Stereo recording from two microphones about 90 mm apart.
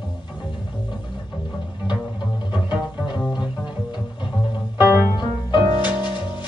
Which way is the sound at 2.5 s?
60° left (ahead or behind).